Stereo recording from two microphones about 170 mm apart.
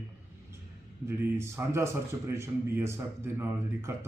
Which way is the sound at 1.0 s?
15° right (ahead or behind).